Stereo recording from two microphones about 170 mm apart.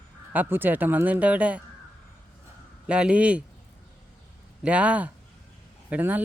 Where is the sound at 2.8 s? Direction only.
5° right (ahead or behind).